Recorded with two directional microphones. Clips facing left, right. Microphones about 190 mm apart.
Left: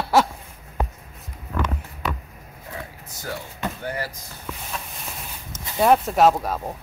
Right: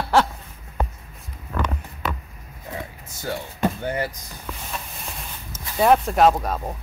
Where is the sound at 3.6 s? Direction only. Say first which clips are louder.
Right 6 dB; 25° right (ahead or behind).